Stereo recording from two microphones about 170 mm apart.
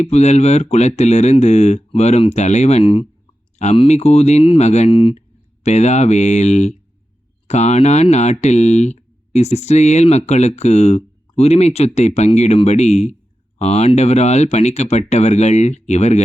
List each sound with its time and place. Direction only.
0.0 s speech: 40° left (ahead or behind)